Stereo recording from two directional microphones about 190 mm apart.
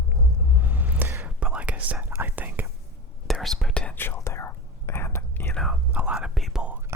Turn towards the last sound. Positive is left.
turn(degrees=-5)  # may be behind; listen again after turning